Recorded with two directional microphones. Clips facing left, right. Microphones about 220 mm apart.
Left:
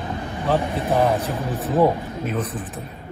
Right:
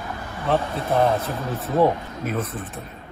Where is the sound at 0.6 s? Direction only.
15° left (ahead or behind).